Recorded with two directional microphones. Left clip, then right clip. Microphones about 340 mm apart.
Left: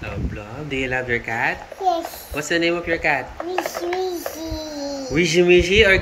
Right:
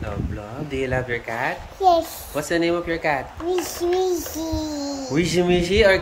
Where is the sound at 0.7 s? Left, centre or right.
Centre.